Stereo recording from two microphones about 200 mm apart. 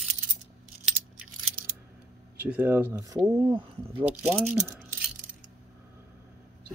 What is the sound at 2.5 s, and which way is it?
Speech, 10° right (ahead or behind).